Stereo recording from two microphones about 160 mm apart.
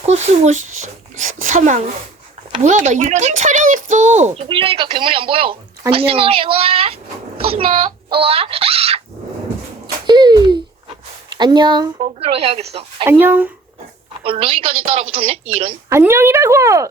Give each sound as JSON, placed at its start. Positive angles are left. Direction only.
{"t": 0.0, "sound": "speech", "side_deg": -45}
{"t": 4.4, "sound": "a woman's voice", "side_deg": -35}
{"t": 9.8, "sound": "a sound", "side_deg": -30}
{"t": 11.3, "sound": "speech", "side_deg": -30}
{"t": 12.3, "sound": "a woman's voice", "side_deg": -40}
{"t": 13.1, "sound": "speech", "side_deg": -10}
{"t": 14.3, "sound": "a woman's voice", "side_deg": -35}
{"t": 15.9, "sound": "speech", "side_deg": -15}